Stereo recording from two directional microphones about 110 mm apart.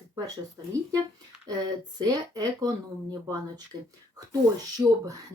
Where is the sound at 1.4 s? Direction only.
40° right (ahead or behind).